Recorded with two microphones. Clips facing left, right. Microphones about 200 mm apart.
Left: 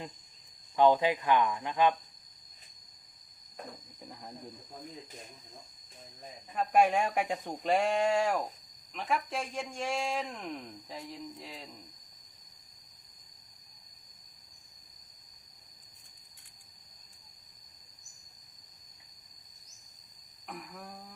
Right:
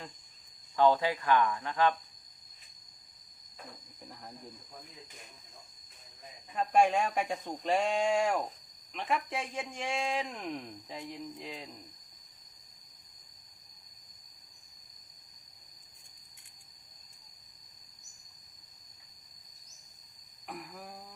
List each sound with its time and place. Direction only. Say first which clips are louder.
0.8 s speech: left 2 dB; 15° left (ahead or behind)
6.5 s speech: even; 5° left (ahead or behind)
20.5 s speech: even; centre (ahead or behind)